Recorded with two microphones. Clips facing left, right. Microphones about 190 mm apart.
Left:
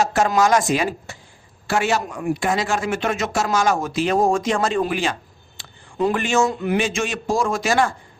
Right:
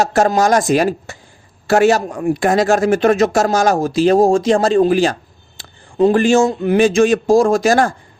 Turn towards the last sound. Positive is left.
turn(degrees=-40)  # may be behind; listen again after turning